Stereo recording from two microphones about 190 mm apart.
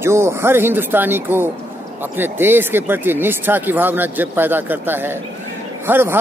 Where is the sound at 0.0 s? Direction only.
15° right (ahead or behind).